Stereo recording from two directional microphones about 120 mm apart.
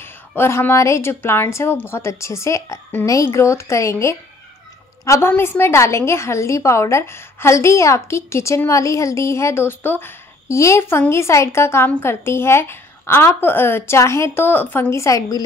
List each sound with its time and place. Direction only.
0.0 s a woman's voice: 20° left (ahead or behind)